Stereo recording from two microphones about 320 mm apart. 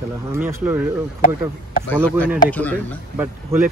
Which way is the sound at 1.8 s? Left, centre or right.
Centre.